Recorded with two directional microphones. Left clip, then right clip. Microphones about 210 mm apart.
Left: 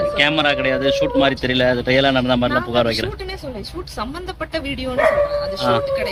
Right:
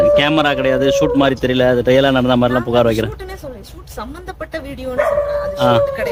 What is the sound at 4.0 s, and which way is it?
Speech, 10° right (ahead or behind).